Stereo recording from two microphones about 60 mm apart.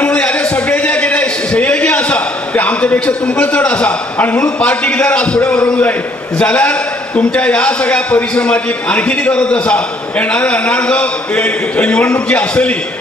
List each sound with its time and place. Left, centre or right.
0.0 s a man's voice: left